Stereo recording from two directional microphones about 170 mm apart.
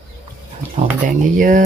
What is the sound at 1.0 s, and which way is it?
Speech, 50° right (ahead or behind).